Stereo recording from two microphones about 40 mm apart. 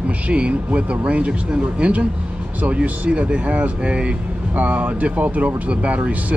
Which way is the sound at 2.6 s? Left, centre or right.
Right.